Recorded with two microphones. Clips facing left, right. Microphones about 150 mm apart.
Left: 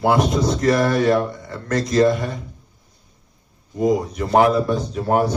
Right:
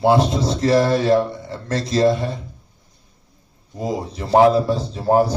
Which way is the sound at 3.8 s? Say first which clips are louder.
Left 6 dB; 30° right (ahead or behind).